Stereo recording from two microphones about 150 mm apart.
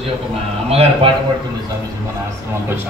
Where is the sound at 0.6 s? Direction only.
40° right (ahead or behind).